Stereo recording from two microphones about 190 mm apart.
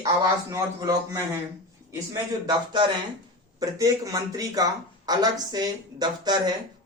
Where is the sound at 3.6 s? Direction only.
20° right (ahead or behind).